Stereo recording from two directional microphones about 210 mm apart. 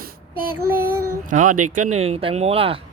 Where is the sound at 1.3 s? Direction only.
40° right (ahead or behind).